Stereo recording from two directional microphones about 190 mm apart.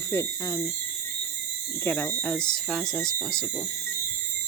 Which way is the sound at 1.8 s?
10° left (ahead or behind).